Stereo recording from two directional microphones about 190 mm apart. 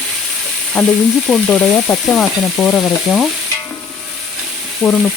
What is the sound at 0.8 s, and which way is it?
Frying, 5° left (ahead or behind).